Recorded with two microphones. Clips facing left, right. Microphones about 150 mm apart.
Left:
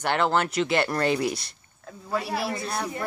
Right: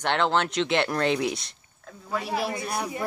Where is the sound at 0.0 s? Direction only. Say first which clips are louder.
Even; 5° left (ahead or behind).